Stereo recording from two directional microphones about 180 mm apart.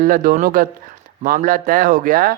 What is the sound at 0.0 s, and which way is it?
Speech, 50° right (ahead or behind).